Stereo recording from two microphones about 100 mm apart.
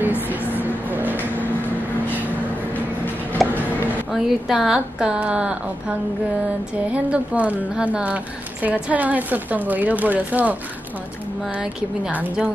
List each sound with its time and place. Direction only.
0.3 s vehicle: 15° right (ahead or behind)
3.4 s a sound: centre (ahead or behind)
4.1 s a woman's voice: 5° right (ahead or behind)
6.9 s a woman's voice: 15° right (ahead or behind)